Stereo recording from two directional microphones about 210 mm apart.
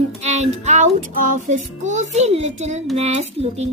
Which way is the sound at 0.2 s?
35° right (ahead or behind).